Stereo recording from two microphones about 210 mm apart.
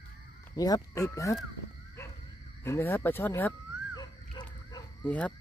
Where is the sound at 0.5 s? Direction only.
15° left (ahead or behind).